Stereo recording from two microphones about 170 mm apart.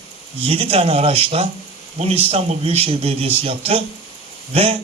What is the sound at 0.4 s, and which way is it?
Speech, 35° right (ahead or behind).